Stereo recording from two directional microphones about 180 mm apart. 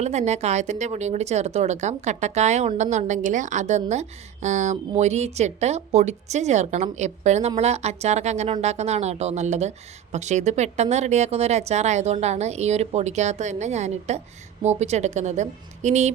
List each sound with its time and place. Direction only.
0.0 s speech: 40° right (ahead or behind)